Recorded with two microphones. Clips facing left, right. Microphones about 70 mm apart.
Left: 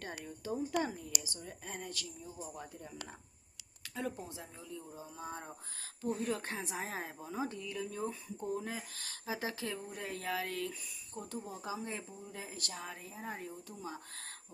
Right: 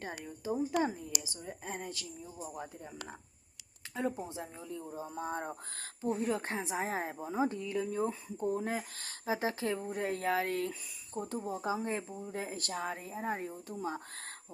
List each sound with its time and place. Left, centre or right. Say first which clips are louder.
0.0 s a woman's voice: right 3 dB; centre; by 5.9 s right
6.0 s speech: right 3 dB; right